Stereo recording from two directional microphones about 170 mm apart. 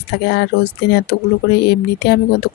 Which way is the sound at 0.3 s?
75° left (ahead or behind).